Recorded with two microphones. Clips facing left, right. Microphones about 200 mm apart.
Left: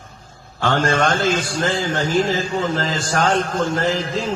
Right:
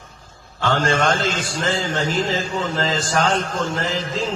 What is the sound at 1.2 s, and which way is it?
A man's voice, 45° left (ahead or behind).